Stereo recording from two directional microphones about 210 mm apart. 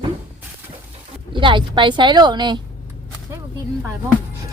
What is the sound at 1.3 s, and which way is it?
Speech, 20° right (ahead or behind).